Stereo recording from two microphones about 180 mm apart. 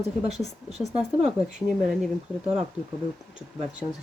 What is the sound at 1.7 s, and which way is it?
Speech, centre (ahead or behind).